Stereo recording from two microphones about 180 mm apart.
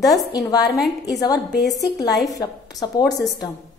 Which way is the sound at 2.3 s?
20° left (ahead or behind).